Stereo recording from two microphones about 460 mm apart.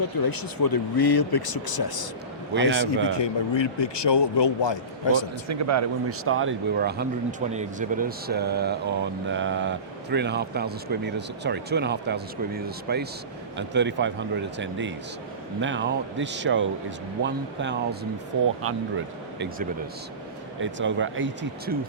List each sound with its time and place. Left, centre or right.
0.2 s speech: left
3.2 s speech: left
5.5 s speech: right